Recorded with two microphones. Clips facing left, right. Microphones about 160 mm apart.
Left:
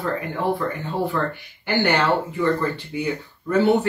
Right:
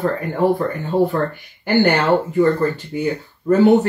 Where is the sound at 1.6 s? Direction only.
45° right (ahead or behind).